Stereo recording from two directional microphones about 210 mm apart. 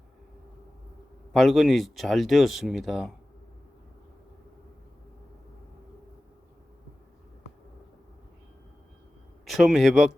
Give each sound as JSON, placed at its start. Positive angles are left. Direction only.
{"t": 1.3, "sound": "speech", "side_deg": 0}
{"t": 9.5, "sound": "speech", "side_deg": 0}